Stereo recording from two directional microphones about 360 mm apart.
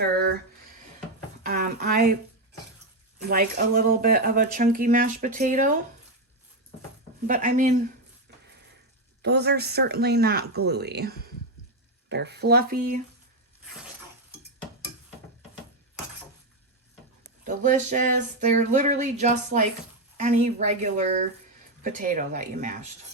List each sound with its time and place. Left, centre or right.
1.5 s a sound: right
3.2 s speech: right
7.3 s speech: right
9.2 s speech: right
17.4 s speech: right